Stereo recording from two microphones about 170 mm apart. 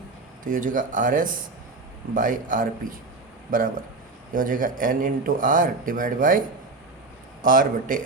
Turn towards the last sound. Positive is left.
turn(degrees=-55)  # may be behind; listen again after turning